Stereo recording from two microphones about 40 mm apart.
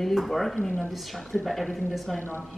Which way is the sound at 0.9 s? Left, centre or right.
Centre.